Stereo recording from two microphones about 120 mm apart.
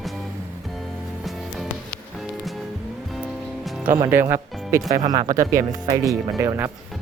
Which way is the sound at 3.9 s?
20° right (ahead or behind).